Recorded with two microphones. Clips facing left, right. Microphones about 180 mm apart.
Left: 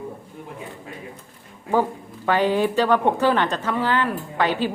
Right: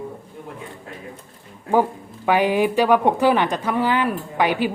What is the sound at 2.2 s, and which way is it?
A woman's voice, 10° right (ahead or behind).